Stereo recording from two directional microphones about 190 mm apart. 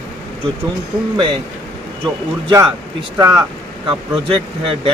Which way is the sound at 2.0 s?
20° right (ahead or behind).